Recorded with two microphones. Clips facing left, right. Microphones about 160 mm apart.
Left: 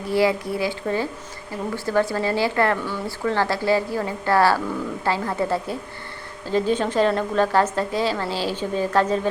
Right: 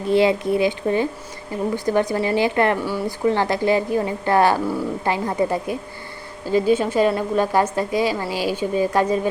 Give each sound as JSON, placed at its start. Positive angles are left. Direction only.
{"t": 0.1, "sound": "a woman's voice", "side_deg": -20}